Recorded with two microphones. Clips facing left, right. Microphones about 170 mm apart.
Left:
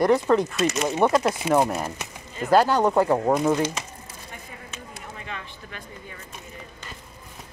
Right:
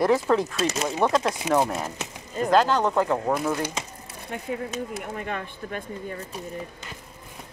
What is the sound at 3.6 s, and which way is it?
Speech, 15° right (ahead or behind).